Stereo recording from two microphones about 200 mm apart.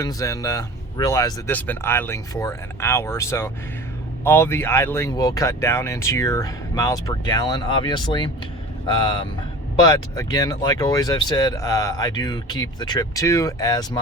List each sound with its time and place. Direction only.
0.0 s speech: 15° left (ahead or behind)